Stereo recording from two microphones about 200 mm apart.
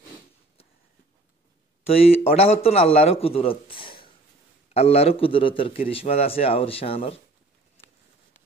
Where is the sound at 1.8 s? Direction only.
30° left (ahead or behind).